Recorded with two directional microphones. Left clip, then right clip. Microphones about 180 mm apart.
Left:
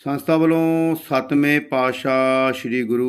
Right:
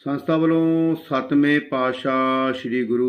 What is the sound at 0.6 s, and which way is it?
Music, 25° left (ahead or behind).